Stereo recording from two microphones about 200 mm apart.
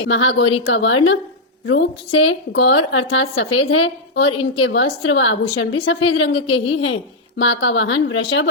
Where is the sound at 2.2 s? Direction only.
75° left (ahead or behind).